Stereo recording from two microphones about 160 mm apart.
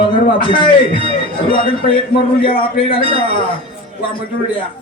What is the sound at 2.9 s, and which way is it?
Speech, 35° left (ahead or behind).